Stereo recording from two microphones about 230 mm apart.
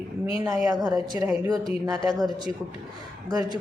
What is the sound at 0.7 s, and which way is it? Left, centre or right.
Speech, centre.